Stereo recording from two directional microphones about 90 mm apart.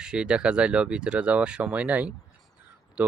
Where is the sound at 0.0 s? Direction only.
10° right (ahead or behind).